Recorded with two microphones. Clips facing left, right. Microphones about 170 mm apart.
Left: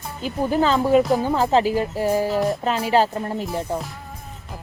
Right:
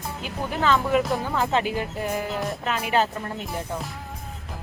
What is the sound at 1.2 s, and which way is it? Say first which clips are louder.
Speech: left 6 dB; 30° left (ahead or behind).